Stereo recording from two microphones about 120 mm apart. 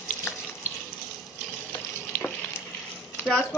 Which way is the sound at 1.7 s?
15° left (ahead or behind).